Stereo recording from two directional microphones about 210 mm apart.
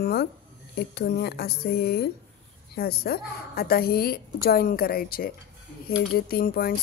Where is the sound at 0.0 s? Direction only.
50° left (ahead or behind).